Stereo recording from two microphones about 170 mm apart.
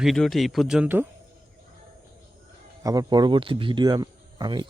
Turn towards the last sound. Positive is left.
turn(degrees=-25)  # may be behind; listen again after turning